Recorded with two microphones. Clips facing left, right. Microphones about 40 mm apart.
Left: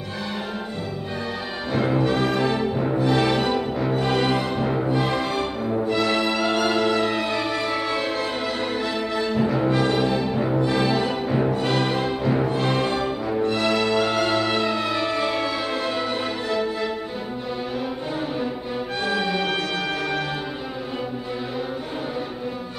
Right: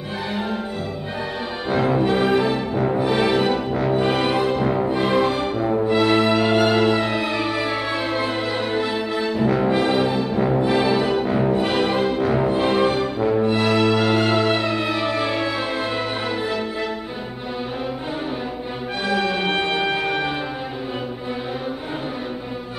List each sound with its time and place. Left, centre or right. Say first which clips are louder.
1.9 s music: right 3 dB; centre
13.7 s music: right 3 dB; right
13.9 s music: right 2 dB; centre
19.0 s music: right 3 dB; centre